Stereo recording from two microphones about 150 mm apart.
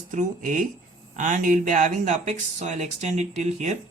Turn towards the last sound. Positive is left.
turn(degrees=-50)  # may be behind; listen again after turning